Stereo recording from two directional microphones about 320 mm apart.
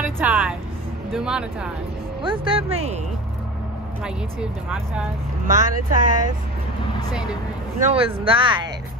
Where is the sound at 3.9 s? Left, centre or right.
Centre.